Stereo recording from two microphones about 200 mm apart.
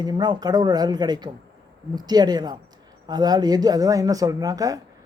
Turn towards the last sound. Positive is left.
turn(degrees=-15)  # may be behind; listen again after turning